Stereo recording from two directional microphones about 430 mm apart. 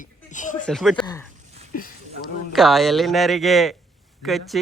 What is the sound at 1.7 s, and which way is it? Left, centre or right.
Speech, centre.